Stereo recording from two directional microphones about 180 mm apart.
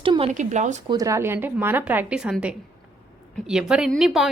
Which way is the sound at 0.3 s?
40° right (ahead or behind).